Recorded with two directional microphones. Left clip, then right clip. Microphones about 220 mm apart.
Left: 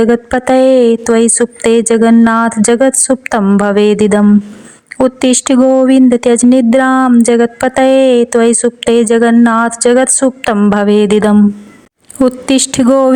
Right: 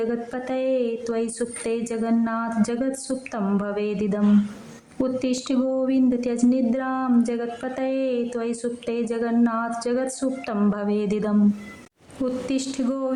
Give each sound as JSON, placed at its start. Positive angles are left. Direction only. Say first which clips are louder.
{"t": 0.0, "sound": "a woman's voice", "louder": "left 16 dB", "side_deg": 40}